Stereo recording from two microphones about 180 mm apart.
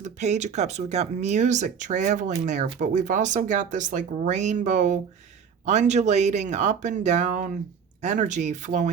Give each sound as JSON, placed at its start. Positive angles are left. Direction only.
{"t": 0.0, "sound": "speech", "side_deg": -40}